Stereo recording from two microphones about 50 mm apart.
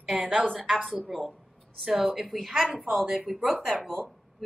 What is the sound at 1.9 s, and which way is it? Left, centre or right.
A woman's voice, centre.